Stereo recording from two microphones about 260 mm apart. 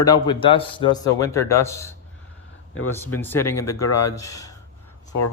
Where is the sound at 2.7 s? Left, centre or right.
Left.